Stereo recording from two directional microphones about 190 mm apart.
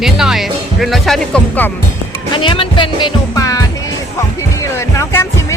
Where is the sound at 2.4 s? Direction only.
25° left (ahead or behind).